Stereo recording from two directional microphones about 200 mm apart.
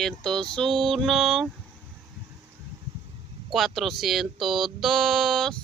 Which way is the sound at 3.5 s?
Centre (ahead or behind).